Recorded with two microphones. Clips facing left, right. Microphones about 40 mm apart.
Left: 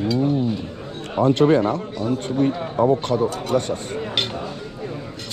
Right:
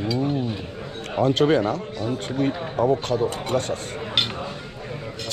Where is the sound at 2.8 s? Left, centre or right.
Left.